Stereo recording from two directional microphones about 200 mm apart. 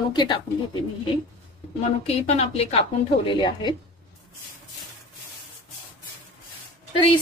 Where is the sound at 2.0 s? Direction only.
30° left (ahead or behind).